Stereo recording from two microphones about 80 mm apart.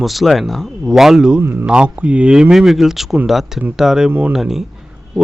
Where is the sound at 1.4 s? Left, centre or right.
Right.